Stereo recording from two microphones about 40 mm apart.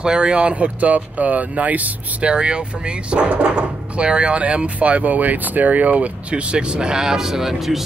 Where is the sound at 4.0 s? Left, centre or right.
Right.